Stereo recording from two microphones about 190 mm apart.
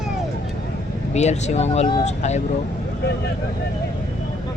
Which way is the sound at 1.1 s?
35° left (ahead or behind).